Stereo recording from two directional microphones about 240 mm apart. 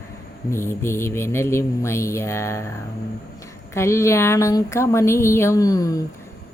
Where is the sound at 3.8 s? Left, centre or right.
Centre.